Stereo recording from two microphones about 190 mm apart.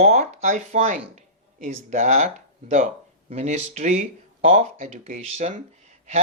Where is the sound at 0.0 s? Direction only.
35° right (ahead or behind).